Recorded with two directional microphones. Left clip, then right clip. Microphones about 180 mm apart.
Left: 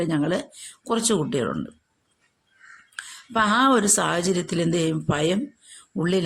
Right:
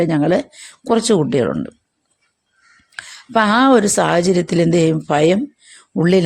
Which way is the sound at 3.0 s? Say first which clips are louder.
Right 7 dB; 40° right (ahead or behind).